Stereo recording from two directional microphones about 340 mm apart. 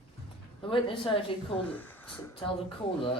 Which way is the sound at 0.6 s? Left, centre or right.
Centre.